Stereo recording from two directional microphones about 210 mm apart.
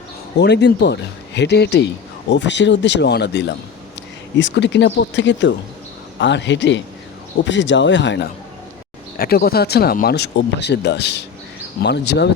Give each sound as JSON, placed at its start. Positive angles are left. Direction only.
{"t": 0.3, "sound": "speech", "side_deg": 55}
{"t": 9.1, "sound": "speech", "side_deg": 45}